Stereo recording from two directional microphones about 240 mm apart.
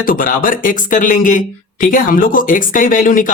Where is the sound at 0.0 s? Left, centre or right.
Left.